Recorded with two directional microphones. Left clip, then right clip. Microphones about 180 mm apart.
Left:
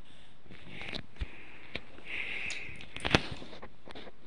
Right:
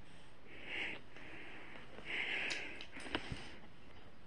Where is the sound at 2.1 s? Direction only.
20° right (ahead or behind).